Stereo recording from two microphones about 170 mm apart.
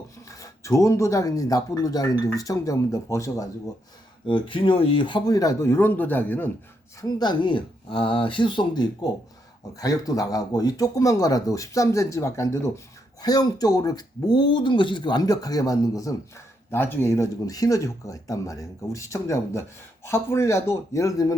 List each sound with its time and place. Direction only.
0.3 s speech: 20° left (ahead or behind)
4.3 s speech: 30° left (ahead or behind); by 6.5 s 10° left (ahead or behind)
7.0 s speech: 25° left (ahead or behind)